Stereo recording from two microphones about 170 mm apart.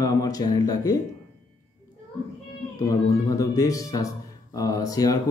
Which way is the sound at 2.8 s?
20° left (ahead or behind).